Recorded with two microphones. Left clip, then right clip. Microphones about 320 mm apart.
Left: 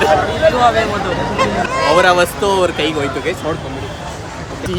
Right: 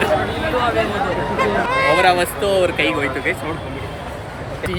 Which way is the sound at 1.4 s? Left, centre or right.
Left.